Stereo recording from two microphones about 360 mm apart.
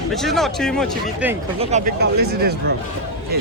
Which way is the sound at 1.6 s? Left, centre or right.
Centre.